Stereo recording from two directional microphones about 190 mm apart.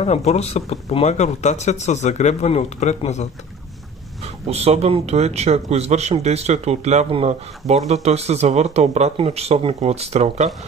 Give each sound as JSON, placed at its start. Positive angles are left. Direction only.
{"t": 0.0, "sound": "speech", "side_deg": 35}
{"t": 4.5, "sound": "speech", "side_deg": -35}